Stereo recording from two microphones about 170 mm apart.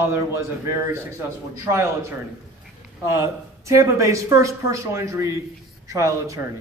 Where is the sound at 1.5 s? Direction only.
15° right (ahead or behind).